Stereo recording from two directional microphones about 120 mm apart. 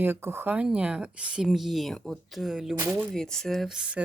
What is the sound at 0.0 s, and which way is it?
Speech, 20° right (ahead or behind).